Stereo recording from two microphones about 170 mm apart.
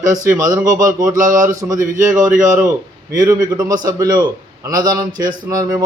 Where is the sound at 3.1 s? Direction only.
20° right (ahead or behind).